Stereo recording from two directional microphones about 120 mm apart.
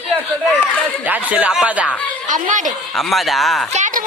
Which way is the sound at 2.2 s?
90° right.